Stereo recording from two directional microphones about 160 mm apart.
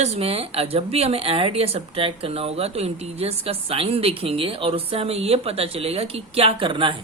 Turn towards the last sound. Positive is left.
turn(degrees=-30)  # may be behind; listen again after turning